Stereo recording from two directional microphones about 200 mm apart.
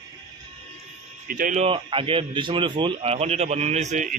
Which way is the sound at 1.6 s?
25° right (ahead or behind).